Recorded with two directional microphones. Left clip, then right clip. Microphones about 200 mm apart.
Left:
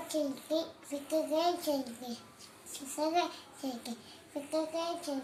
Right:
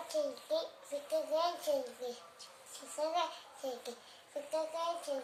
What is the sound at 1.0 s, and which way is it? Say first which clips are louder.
A child's voice: left 3 dB; 10° right (ahead or behind).